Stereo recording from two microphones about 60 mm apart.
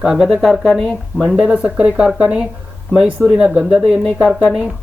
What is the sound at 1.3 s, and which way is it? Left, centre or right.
Speech, centre.